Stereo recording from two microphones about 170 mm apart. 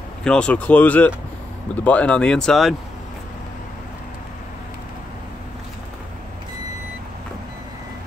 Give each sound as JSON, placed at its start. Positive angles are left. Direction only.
{"t": 0.2, "sound": "speech", "side_deg": 5}